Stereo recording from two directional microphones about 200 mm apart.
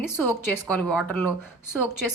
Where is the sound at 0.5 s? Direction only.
5° left (ahead or behind).